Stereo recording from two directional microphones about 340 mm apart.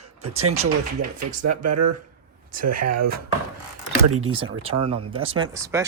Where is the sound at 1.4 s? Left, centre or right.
Right.